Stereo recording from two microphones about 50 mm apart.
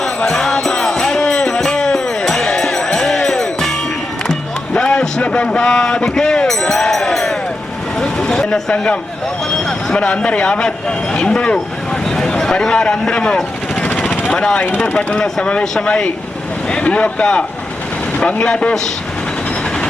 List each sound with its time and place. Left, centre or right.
0.3 s music: centre
4.7 s a sound: centre
7.9 s vehicle: centre
9.6 s speech: centre
13.7 s vehicle: left
14.3 s speech: centre
14.6 s speech: left
15.2 s speech: centre
16.6 s speech: left